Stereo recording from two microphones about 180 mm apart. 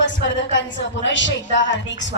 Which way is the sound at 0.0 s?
90° left.